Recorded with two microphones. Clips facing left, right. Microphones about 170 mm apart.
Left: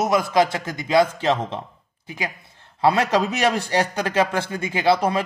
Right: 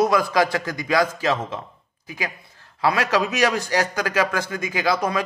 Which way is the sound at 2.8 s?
30° left (ahead or behind).